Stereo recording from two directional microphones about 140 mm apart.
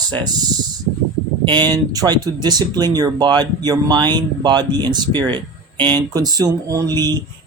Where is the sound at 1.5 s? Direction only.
30° right (ahead or behind).